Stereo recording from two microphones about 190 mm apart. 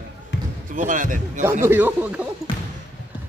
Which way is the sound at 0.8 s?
45° right (ahead or behind).